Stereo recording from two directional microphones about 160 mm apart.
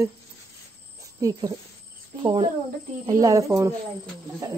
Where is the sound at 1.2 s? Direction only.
20° right (ahead or behind).